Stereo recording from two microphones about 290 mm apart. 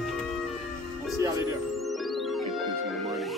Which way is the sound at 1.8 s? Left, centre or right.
Centre.